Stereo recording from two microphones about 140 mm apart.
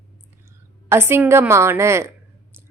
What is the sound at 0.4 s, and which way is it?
A woman's voice, 15° right (ahead or behind).